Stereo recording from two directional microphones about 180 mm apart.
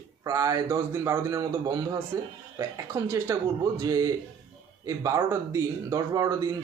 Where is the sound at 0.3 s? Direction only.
20° right (ahead or behind).